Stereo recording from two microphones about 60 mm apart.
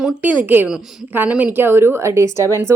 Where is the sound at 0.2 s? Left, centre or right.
Right.